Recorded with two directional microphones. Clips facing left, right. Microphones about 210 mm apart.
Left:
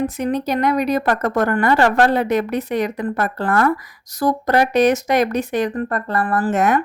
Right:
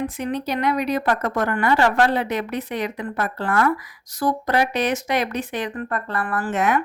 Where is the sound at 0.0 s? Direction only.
40° left (ahead or behind).